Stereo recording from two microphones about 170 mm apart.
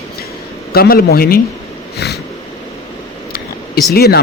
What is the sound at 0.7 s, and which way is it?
Speech, 65° left (ahead or behind).